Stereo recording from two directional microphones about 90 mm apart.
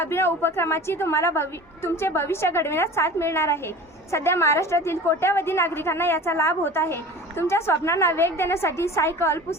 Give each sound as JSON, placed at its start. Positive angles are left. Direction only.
{"t": 0.0, "sound": "a woman's voice", "side_deg": 25}